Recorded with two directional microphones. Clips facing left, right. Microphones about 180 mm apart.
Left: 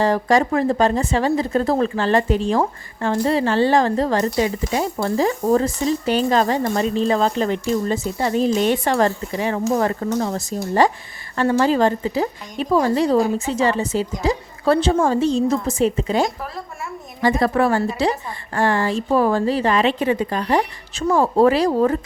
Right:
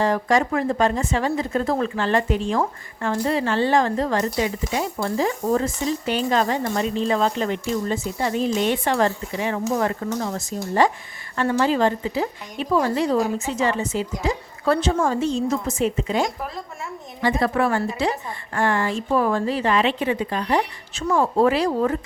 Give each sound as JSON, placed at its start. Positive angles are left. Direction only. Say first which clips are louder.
{"t": 0.0, "sound": "speech", "louder": "left 3 dB", "side_deg": 35}